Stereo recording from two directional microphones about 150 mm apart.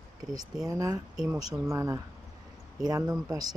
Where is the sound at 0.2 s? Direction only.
25° right (ahead or behind).